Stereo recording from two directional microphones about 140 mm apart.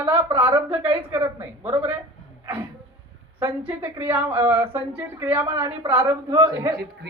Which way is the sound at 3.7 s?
15° right (ahead or behind).